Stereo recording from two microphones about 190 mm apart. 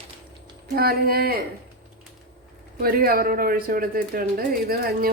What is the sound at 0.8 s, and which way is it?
Speech, 55° right (ahead or behind).